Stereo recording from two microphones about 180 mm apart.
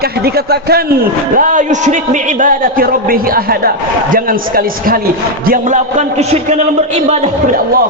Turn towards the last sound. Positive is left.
turn(degrees=-40)  # may be behind; listen again after turning